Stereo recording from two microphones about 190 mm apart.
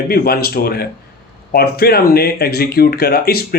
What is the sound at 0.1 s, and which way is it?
Speech, 55° left (ahead or behind).